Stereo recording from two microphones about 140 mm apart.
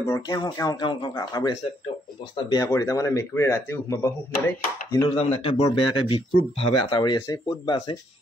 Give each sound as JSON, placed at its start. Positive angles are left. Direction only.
{"t": 0.0, "sound": "speech", "side_deg": 25}
{"t": 5.1, "sound": "speech", "side_deg": 45}